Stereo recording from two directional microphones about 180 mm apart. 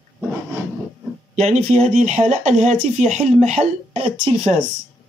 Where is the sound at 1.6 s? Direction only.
40° right (ahead or behind).